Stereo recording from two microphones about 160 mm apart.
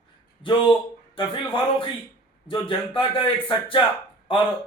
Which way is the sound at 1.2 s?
35° left (ahead or behind).